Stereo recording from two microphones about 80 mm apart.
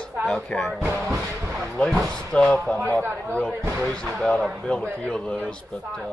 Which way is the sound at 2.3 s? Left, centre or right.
Centre.